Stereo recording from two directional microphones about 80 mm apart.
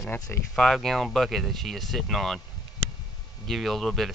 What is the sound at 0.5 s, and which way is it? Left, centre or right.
Speech, centre.